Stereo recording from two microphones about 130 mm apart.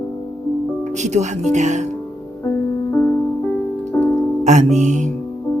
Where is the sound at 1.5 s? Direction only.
65° right (ahead or behind).